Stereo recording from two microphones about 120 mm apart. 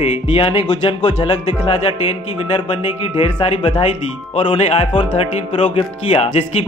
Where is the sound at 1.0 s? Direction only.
70° left (ahead or behind).